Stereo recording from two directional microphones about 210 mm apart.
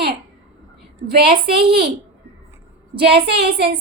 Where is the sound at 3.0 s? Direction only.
50° right (ahead or behind).